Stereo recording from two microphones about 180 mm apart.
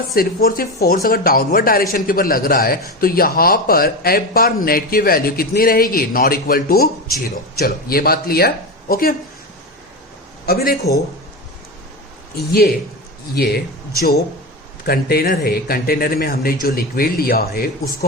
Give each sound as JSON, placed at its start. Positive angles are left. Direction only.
{"t": 0.1, "sound": "a man's voice", "side_deg": 55}
{"t": 10.4, "sound": "a man's voice", "side_deg": 55}
{"t": 12.5, "sound": "a man's voice", "side_deg": 55}
{"t": 14.8, "sound": "a man's voice", "side_deg": 60}